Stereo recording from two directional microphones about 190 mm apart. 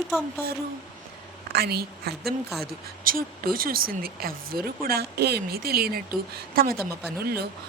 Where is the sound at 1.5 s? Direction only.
55° right (ahead or behind).